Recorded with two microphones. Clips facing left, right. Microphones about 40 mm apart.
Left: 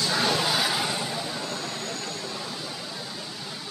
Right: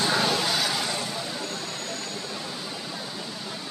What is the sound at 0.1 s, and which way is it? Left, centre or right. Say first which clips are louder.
Vehicle: even; centre.